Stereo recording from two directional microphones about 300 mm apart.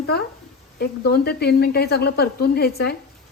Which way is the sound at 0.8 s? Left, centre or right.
Left.